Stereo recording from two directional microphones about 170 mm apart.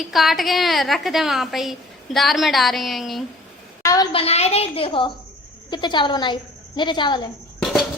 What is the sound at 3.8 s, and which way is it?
A woman's voice, 25° left (ahead or behind).